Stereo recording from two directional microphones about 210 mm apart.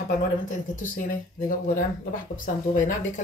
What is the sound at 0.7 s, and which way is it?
Speech, 40° left (ahead or behind).